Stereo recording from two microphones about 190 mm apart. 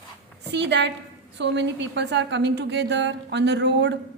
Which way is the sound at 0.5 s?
65° right (ahead or behind).